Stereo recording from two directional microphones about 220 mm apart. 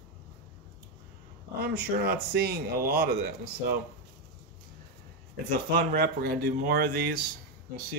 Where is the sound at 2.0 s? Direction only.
45° right (ahead or behind).